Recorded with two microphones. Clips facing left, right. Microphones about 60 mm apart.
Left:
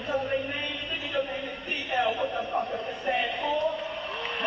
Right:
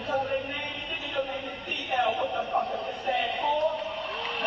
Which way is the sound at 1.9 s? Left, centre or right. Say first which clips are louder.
Right 1 dB; right.